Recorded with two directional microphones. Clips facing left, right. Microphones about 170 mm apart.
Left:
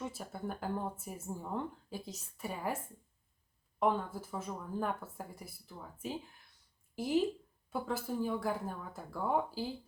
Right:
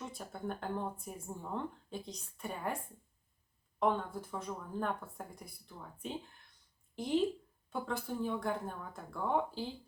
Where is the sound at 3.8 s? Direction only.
5° left (ahead or behind).